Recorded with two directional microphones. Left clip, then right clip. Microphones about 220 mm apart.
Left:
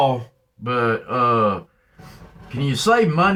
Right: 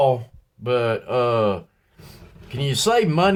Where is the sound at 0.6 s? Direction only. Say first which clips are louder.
Left 1 dB; 55° right (ahead or behind).